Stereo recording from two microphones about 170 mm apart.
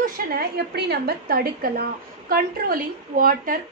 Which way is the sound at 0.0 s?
65° right (ahead or behind).